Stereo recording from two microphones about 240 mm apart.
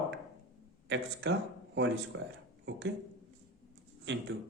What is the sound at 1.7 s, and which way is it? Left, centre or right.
A man's voice, right.